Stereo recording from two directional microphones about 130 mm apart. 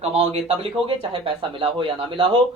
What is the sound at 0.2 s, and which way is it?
Speech, 50° right (ahead or behind).